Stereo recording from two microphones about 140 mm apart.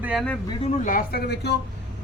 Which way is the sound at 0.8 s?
85° left.